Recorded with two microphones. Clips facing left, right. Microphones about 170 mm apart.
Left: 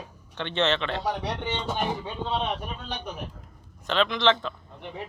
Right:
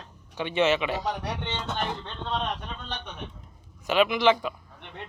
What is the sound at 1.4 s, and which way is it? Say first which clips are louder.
Speech: left 2 dB; 10° left (ahead or behind).